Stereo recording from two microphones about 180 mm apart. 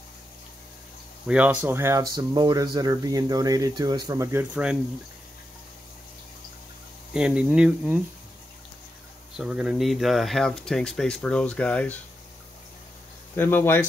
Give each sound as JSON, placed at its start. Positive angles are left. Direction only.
{"t": 1.2, "sound": "speech", "side_deg": -5}
{"t": 7.2, "sound": "speech", "side_deg": -5}
{"t": 9.4, "sound": "speech", "side_deg": -5}
{"t": 13.4, "sound": "speech", "side_deg": 10}